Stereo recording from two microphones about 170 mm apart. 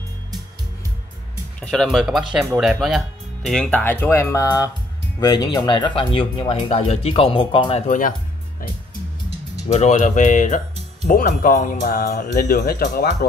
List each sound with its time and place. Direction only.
1.6 s speech: 5° left (ahead or behind); by 7.8 s 30° left (ahead or behind)
9.7 s speech: 40° left (ahead or behind); by 13.3 s 65° left (ahead or behind)